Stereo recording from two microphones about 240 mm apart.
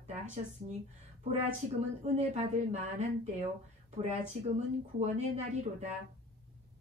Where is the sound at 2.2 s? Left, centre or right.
Right.